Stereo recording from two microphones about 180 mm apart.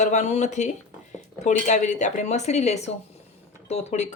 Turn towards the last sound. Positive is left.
turn(degrees=40)  # may be behind; listen again after turning